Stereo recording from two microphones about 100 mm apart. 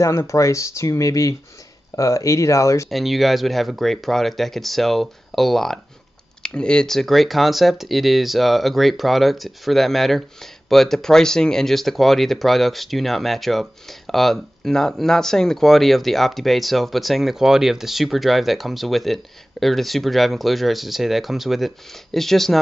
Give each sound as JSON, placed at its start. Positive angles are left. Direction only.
{"t": 0.0, "sound": "speech", "side_deg": 30}
{"t": 2.9, "sound": "speech", "side_deg": 0}